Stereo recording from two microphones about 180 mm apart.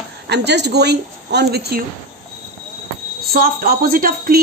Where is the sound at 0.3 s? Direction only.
70° right (ahead or behind).